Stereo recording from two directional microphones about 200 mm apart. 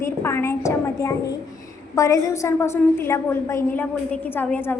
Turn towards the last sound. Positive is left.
turn(degrees=10)  # may be behind; listen again after turning